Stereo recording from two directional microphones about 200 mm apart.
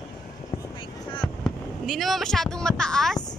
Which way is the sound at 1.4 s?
Centre (ahead or behind).